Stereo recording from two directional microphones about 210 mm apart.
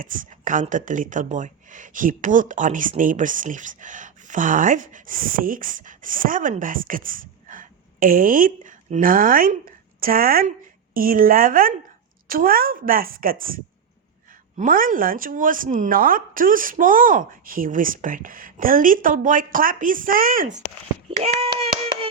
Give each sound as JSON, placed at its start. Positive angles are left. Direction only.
{"t": 0.0, "sound": "a woman's voice", "side_deg": -40}
{"t": 14.6, "sound": "speech", "side_deg": -40}
{"t": 21.2, "sound": "speech", "side_deg": -25}